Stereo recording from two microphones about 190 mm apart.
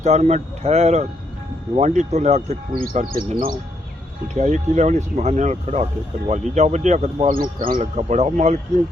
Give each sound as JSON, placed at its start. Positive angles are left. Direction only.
{"t": 0.0, "sound": "a man's voice", "side_deg": -35}
{"t": 4.4, "sound": "a man's voice", "side_deg": -40}